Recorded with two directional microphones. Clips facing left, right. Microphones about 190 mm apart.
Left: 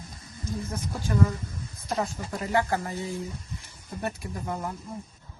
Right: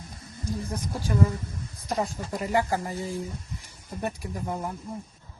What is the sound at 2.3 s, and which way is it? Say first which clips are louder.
Speech: right 1 dB; 10° right (ahead or behind).